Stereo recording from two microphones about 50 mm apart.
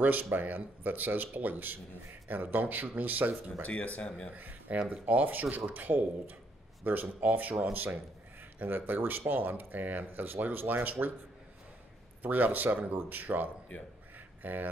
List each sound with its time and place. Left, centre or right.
0.0 s speech: right
3.6 s speech: left
4.4 s speech: right
12.2 s speech: right